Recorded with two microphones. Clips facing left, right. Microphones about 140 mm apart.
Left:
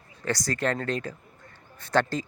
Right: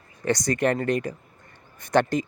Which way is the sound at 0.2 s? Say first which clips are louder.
Right 5 dB; 20° right (ahead or behind).